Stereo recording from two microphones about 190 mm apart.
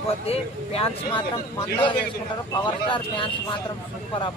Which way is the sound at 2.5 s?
25° left (ahead or behind).